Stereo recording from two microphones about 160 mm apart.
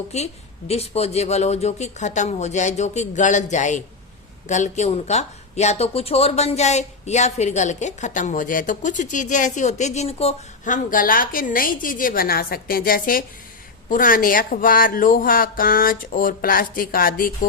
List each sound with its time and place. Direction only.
0.1 s speech: 45° left (ahead or behind)
10.9 s speech: 60° left (ahead or behind)